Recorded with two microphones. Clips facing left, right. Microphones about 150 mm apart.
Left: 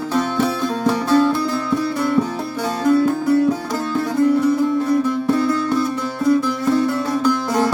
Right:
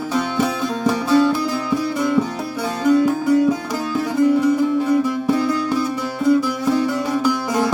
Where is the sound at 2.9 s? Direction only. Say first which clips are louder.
Right 1 dB; 15° right (ahead or behind).